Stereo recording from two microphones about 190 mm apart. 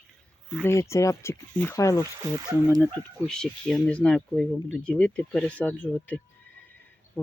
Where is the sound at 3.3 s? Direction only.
5° left (ahead or behind).